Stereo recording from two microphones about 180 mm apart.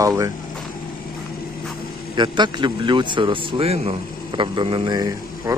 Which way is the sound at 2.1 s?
25° right (ahead or behind).